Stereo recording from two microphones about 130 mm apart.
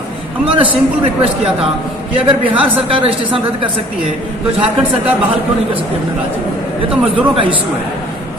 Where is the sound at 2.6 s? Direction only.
45° right (ahead or behind).